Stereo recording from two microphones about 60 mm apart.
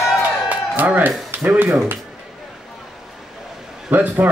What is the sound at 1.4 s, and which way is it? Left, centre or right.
Speech, right.